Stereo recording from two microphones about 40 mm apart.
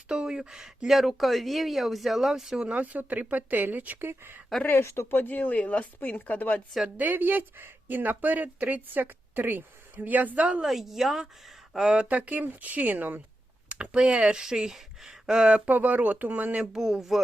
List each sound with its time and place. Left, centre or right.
0.1 s speech: centre
2.7 s speech: right
4.0 s speech: right
4.6 s speech: left
5.2 s speech: left
6.9 s speech: right
10.6 s a woman's voice: centre
11.7 s speech: centre
12.0 s speech: right
13.7 s speech: right
14.4 s speech: centre
15.5 s speech: right
16.7 s a woman's voice: centre